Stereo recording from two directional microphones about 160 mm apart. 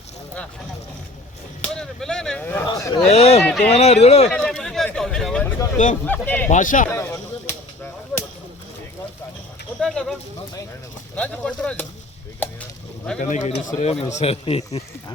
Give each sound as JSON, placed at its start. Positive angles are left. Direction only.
{"t": 1.6, "sound": "speech", "side_deg": 5}
{"t": 3.1, "sound": "speech", "side_deg": 40}
{"t": 3.4, "sound": "speech", "side_deg": 10}
{"t": 3.7, "sound": "speech", "side_deg": 40}
{"t": 4.3, "sound": "a sound", "side_deg": 5}
{"t": 6.1, "sound": "speech", "side_deg": 10}
{"t": 6.5, "sound": "speech", "side_deg": 55}
{"t": 6.9, "sound": "a sound", "side_deg": 15}
{"t": 9.8, "sound": "speech", "side_deg": 5}
{"t": 12.4, "sound": "a sound", "side_deg": 10}
{"t": 13.1, "sound": "a man's voice", "side_deg": 50}